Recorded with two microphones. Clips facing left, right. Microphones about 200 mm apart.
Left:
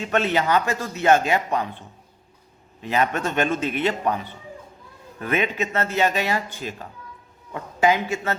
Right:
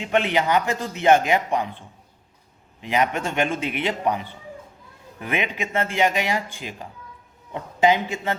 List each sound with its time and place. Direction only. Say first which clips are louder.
0.0 s a man's voice: even; 15° right (ahead or behind)
2.8 s a man's voice: even; 15° right (ahead or behind)